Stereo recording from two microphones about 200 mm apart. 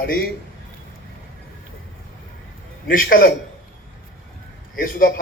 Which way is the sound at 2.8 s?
45° left (ahead or behind).